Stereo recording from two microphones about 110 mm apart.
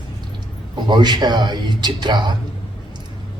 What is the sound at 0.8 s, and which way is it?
A man's voice, 40° right (ahead or behind).